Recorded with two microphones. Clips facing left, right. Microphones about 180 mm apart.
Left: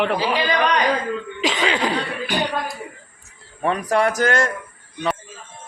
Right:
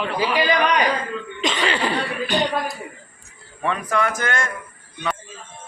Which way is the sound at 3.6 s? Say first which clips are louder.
Left 3 dB; 40° left (ahead or behind).